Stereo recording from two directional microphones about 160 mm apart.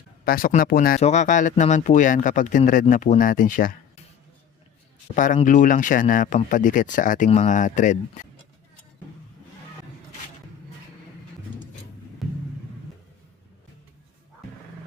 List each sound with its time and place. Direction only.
0.3 s speech: 60° left (ahead or behind)
1.0 s speech: 50° left (ahead or behind)
5.1 s speech: 55° left (ahead or behind)